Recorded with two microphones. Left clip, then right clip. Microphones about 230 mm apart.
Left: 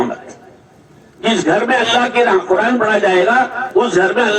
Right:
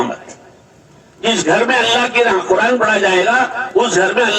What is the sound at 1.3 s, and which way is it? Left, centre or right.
A man's voice, right.